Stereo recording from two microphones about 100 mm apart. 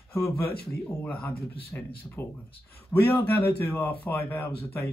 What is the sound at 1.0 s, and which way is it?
Speech, 15° left (ahead or behind).